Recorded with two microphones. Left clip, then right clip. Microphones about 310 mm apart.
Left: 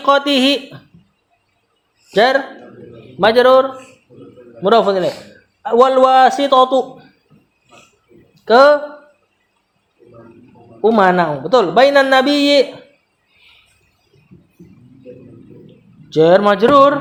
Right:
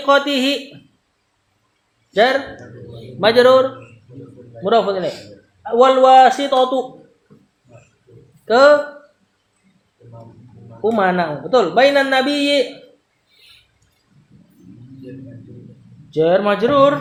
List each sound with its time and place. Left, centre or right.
0.0 s speech: left
3.2 s speech: left
8.4 s speech: left
10.9 s speech: left
16.0 s speech: left